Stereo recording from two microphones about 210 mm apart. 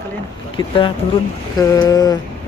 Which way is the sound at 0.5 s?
25° left (ahead or behind).